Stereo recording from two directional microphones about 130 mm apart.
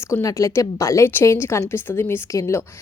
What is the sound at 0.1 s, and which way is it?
A woman's voice, 25° left (ahead or behind).